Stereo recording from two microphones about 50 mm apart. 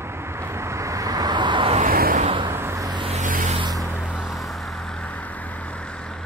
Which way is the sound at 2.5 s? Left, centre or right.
Right.